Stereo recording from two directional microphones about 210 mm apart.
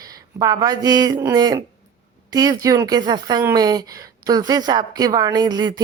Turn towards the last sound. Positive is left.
turn(degrees=-20)  # may be behind; listen again after turning